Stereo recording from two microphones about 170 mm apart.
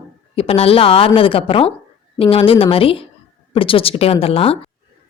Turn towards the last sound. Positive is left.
turn(degrees=35)  # may be behind; listen again after turning